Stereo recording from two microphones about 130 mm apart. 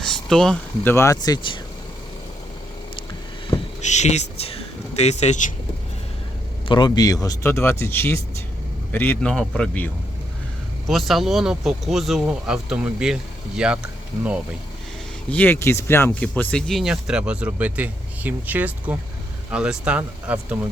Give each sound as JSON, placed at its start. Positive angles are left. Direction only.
{"t": 0.0, "sound": "a sound", "side_deg": 5}
{"t": 0.9, "sound": "speech", "side_deg": 20}
{"t": 3.8, "sound": "speech", "side_deg": 65}
{"t": 6.7, "sound": "speech", "side_deg": 35}
{"t": 10.8, "sound": "speech", "side_deg": 0}
{"t": 15.3, "sound": "speech", "side_deg": 15}